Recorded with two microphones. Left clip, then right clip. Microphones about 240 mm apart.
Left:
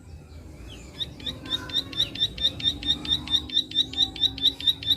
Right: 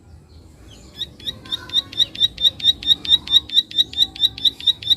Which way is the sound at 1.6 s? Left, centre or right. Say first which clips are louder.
Right 9 dB; right.